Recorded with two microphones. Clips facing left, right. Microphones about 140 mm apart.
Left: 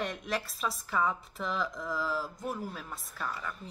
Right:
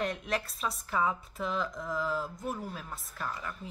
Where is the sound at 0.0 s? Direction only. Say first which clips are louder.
Right 2 dB; centre (ahead or behind).